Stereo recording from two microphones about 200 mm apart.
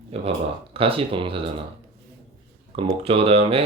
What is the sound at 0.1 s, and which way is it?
Speech, 30° right (ahead or behind).